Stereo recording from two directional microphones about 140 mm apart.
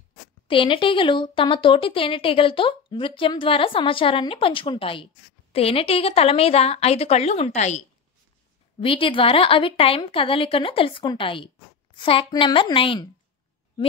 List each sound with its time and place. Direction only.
0.5 s speech: 35° left (ahead or behind); by 7.8 s 55° left (ahead or behind)
8.8 s speech: 40° left (ahead or behind)